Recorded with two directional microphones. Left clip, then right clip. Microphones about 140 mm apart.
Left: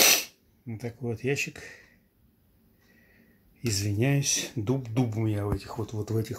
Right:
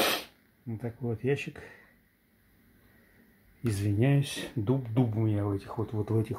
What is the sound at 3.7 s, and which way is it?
Speech, 10° left (ahead or behind).